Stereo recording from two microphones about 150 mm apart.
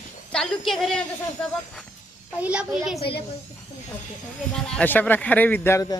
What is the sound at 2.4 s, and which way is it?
Speech, 5° right (ahead or behind).